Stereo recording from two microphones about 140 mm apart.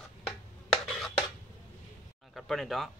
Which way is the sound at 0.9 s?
Centre (ahead or behind).